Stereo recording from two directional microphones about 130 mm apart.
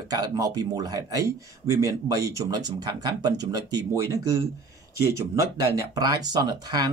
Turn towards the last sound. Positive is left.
turn(degrees=-30)  # may be behind; listen again after turning